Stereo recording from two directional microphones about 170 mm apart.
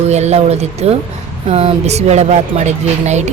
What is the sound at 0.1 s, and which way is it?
Speech, 40° right (ahead or behind).